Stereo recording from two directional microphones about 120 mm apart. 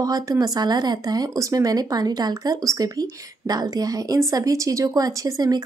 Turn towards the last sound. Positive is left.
turn(degrees=-30)  # may be behind; listen again after turning